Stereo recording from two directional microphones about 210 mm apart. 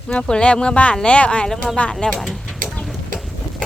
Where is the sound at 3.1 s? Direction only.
Centre (ahead or behind).